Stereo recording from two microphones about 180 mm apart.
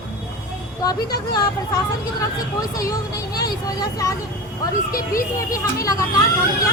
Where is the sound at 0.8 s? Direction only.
20° left (ahead or behind).